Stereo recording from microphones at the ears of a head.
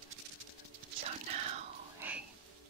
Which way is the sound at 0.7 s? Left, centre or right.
Right.